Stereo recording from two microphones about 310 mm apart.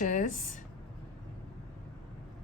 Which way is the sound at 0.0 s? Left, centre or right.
Left.